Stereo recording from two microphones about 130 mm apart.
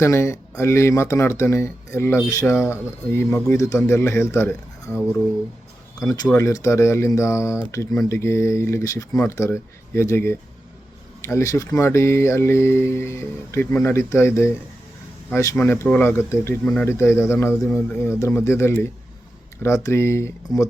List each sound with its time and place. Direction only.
0.0 s speech: 20° left (ahead or behind)
6.0 s speech: 30° left (ahead or behind)